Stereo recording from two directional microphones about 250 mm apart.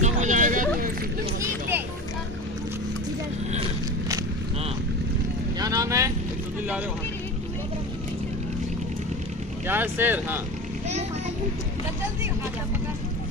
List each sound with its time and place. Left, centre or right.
0.0 s a sound: right
5.5 s boat: centre
9.6 s speech: centre